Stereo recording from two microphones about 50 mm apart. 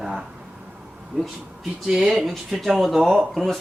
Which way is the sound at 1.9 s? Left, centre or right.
Centre.